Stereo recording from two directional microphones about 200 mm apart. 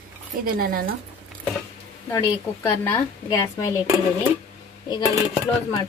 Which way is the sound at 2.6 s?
10° left (ahead or behind).